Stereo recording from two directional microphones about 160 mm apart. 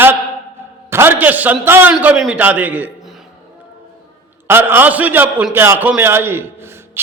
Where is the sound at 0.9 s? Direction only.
15° right (ahead or behind).